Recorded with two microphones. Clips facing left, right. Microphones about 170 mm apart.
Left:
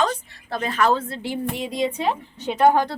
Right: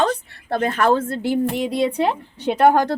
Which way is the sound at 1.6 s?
70° right (ahead or behind).